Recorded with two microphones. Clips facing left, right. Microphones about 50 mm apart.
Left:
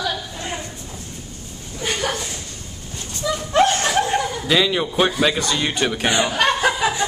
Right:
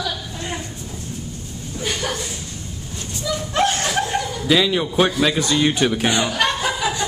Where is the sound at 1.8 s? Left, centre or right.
Centre.